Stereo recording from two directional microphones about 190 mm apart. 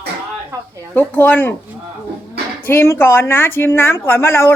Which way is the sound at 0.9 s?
10° left (ahead or behind).